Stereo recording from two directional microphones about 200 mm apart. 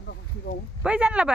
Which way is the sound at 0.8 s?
5° right (ahead or behind).